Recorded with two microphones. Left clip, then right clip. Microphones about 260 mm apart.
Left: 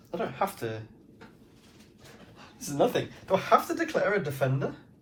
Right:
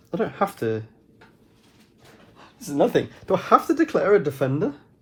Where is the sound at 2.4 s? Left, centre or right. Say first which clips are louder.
Right 5 dB; right.